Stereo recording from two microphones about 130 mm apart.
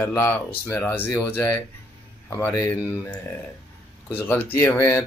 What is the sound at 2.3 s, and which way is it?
Speech, 25° left (ahead or behind).